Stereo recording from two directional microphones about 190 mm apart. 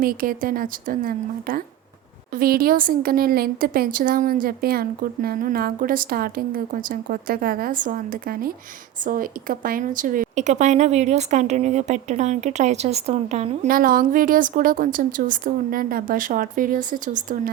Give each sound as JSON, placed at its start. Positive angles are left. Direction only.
{"t": 0.0, "sound": "a woman's voice", "side_deg": -50}
{"t": 13.7, "sound": "a woman's voice", "side_deg": -50}